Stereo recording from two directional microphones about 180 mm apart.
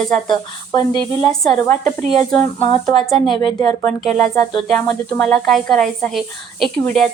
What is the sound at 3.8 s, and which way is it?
A woman's voice, 5° left (ahead or behind).